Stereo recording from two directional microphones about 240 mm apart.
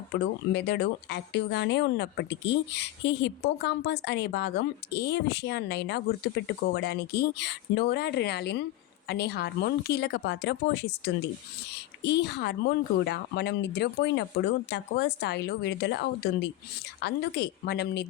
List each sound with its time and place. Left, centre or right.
0.5 s speech: left